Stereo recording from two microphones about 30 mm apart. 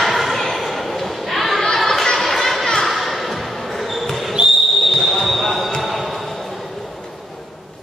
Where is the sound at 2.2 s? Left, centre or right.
Centre.